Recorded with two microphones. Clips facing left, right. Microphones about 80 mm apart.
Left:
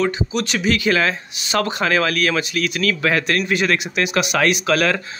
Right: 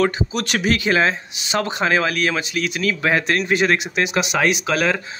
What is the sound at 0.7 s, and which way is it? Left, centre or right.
Speech, right.